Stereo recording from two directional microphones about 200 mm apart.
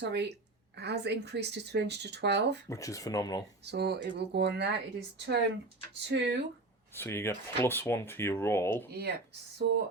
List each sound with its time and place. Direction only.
0.0 s speech: 55° right (ahead or behind)
2.6 s speech: 15° left (ahead or behind)
3.6 s speech: 55° right (ahead or behind)
6.9 s speech: 10° left (ahead or behind)
8.9 s speech: 50° right (ahead or behind)